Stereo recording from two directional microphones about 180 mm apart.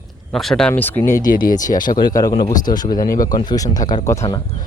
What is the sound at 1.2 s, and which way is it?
Speech, 50° left (ahead or behind).